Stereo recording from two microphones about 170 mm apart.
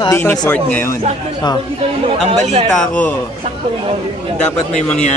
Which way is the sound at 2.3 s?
35° right (ahead or behind).